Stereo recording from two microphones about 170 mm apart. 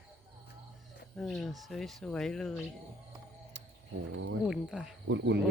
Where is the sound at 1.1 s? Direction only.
5° left (ahead or behind).